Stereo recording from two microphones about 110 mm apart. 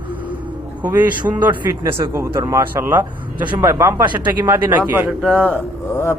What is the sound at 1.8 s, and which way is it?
A man's voice, 25° right (ahead or behind).